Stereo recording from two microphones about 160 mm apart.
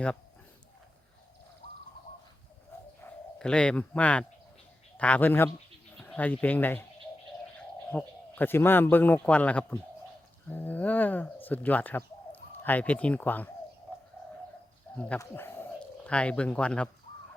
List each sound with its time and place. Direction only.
3.0 s a man's voice: 5° left (ahead or behind)
7.9 s a man's voice: 10° left (ahead or behind)
14.9 s a sound: 10° left (ahead or behind)
15.2 s a man's voice: 15° left (ahead or behind)